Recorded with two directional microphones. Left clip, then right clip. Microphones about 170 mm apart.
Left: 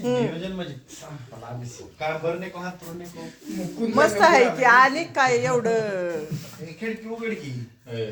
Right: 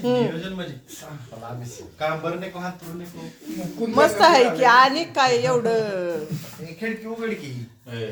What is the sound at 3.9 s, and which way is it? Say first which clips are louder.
Speech: right 2 dB; centre (ahead or behind).